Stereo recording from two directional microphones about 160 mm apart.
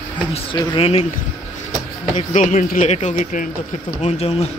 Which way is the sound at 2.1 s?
50° left (ahead or behind).